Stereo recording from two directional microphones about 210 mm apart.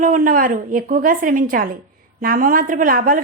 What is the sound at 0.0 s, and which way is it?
A woman's voice, 40° right (ahead or behind).